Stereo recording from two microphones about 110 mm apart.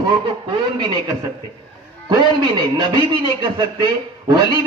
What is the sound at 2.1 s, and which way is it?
A man's voice, 40° right (ahead or behind).